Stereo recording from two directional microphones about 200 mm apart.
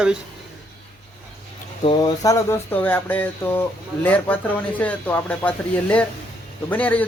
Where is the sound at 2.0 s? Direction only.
15° left (ahead or behind).